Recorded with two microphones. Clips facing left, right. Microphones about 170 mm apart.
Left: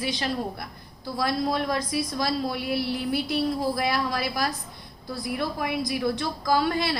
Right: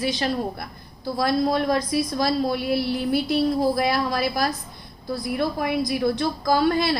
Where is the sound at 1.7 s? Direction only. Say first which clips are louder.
Right 5 dB; 35° right (ahead or behind).